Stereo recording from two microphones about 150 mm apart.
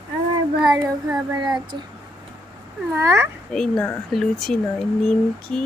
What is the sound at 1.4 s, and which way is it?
Speech, 30° right (ahead or behind).